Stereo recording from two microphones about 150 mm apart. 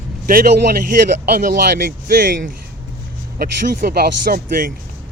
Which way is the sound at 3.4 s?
90° right.